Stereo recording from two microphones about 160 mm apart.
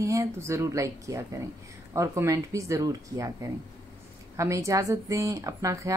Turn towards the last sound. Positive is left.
turn(degrees=-20)  # may be behind; listen again after turning